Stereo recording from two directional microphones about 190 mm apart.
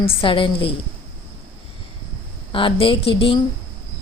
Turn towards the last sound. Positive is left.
turn(degrees=30)  # may be behind; listen again after turning